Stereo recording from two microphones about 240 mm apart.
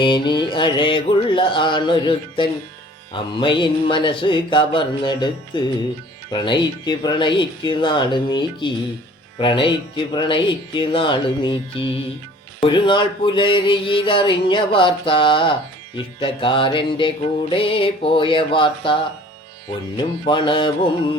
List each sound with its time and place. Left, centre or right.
0.0 s speech: centre
20.0 s speech: centre